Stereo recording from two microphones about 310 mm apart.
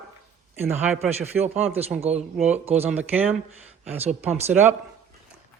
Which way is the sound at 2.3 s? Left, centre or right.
Centre.